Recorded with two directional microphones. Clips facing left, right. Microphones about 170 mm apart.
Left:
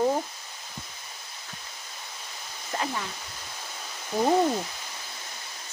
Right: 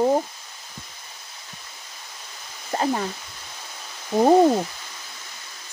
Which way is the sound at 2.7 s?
40° right (ahead or behind).